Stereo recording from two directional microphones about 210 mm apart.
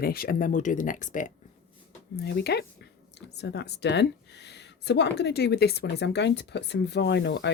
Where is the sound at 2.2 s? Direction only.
50° left (ahead or behind).